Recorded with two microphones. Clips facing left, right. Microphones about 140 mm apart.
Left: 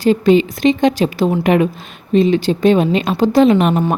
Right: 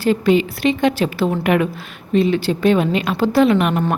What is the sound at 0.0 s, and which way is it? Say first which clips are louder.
A woman's voice: left 4 dB; 25° left (ahead or behind).